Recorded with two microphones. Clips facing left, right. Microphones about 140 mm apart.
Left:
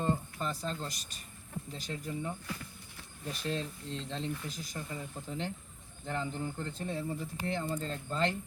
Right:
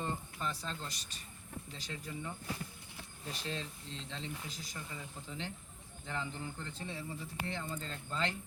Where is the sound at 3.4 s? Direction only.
55° left (ahead or behind).